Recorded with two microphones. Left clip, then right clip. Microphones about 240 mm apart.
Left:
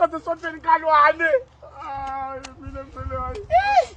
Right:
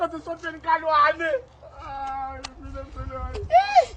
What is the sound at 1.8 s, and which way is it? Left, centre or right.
Cat, centre.